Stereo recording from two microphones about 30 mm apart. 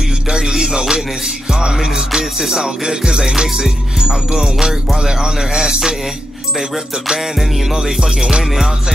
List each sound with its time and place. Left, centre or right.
0.3 s music: right
7.7 s music: right